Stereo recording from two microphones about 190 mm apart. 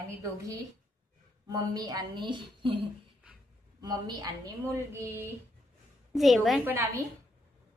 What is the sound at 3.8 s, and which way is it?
Speech, 20° right (ahead or behind).